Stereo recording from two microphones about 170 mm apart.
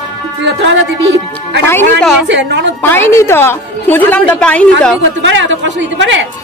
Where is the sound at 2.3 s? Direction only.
90° right.